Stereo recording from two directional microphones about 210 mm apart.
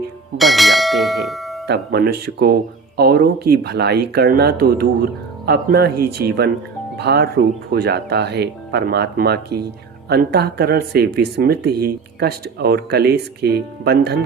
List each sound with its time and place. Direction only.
0.3 s speech: centre (ahead or behind)
1.6 s speech: 50° right (ahead or behind)